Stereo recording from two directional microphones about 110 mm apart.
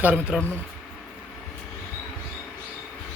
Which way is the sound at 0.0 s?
15° right (ahead or behind).